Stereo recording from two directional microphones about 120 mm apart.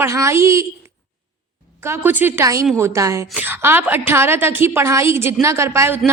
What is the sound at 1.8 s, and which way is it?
A woman's voice, 20° right (ahead or behind).